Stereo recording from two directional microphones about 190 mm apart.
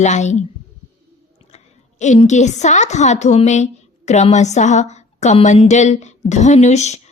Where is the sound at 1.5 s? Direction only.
40° left (ahead or behind).